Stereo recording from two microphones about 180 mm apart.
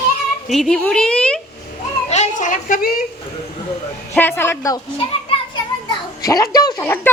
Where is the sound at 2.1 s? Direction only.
40° left (ahead or behind).